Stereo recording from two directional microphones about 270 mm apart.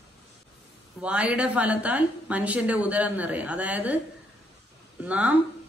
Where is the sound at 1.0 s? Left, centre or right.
Centre.